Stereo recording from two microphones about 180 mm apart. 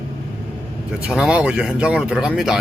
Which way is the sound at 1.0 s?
5° right (ahead or behind).